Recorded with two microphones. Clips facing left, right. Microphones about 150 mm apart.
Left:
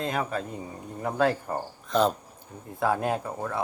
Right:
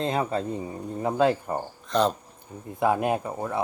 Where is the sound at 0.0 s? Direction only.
25° right (ahead or behind).